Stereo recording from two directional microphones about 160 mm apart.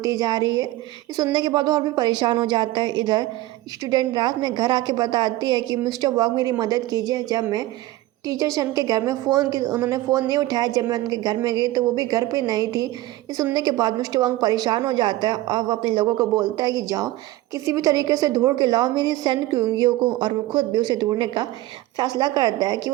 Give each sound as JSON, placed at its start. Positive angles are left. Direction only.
{"t": 0.0, "sound": "a woman's voice", "side_deg": -20}